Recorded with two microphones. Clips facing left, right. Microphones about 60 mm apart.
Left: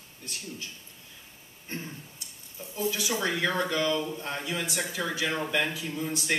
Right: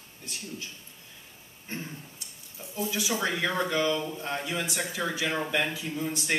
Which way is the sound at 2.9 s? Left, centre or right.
Centre.